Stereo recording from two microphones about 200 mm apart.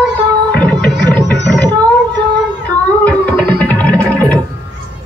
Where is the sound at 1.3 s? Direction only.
20° right (ahead or behind).